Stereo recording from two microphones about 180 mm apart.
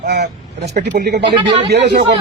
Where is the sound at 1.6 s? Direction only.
70° right (ahead or behind).